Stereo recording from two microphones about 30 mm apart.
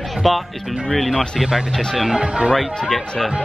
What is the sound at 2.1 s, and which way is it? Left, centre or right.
Speech, right.